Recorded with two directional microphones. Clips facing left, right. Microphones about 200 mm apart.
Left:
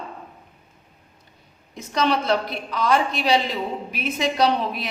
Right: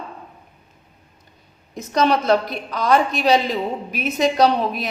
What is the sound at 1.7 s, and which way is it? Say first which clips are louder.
A woman's voice: right 4 dB; 45° right (ahead or behind).